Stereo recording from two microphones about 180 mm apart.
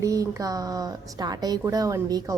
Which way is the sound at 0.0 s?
20° right (ahead or behind).